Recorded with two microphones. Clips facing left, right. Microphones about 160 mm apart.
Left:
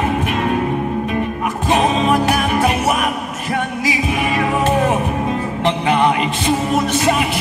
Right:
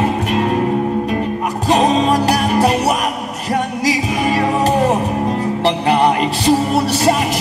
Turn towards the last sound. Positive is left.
turn(degrees=-40)  # may be behind; listen again after turning